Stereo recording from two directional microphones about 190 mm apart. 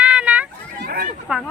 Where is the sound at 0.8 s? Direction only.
50° right (ahead or behind).